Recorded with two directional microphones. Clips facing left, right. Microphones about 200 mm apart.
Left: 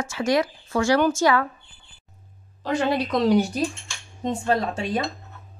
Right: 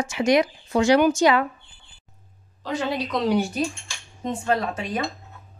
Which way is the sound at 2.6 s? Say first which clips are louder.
Left 3 dB; 55° left (ahead or behind).